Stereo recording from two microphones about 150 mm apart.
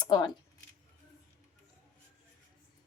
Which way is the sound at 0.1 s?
30° left (ahead or behind).